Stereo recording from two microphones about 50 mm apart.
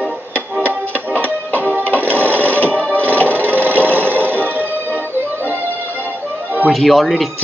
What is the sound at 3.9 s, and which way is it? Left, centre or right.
Music, right.